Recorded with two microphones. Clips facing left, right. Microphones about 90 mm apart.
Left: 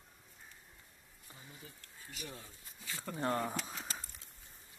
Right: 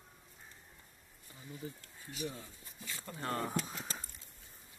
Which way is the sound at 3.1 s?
25° left (ahead or behind).